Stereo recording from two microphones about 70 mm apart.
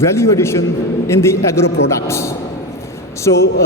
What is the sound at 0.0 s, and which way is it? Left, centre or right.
A man's voice, left.